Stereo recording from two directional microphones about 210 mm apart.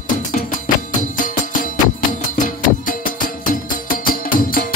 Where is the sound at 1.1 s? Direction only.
40° left (ahead or behind).